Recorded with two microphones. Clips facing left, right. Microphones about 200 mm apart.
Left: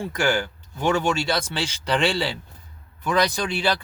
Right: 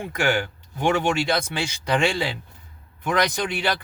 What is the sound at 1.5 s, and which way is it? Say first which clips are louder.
Speech: right 1 dB; 10° right (ahead or behind).